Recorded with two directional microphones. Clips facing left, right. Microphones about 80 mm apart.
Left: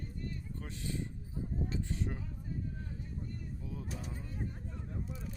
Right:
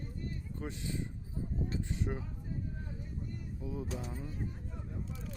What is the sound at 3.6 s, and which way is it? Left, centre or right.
Speech, centre.